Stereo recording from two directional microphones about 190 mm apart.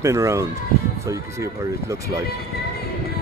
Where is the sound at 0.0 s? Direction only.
15° right (ahead or behind).